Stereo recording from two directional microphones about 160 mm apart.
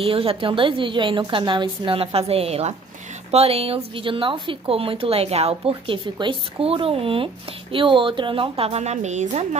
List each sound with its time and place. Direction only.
0.0 s speech: 35° right (ahead or behind)